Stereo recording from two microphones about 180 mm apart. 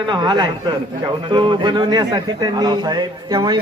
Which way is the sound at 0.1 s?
25° right (ahead or behind).